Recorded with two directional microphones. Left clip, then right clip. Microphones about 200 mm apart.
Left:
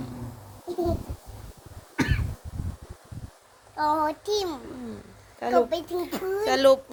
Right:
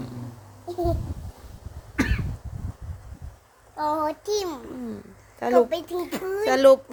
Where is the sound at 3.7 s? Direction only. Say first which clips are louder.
Left 1 dB; 5° right (ahead or behind).